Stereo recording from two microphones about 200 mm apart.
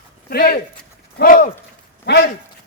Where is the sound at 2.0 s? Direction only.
55° left (ahead or behind).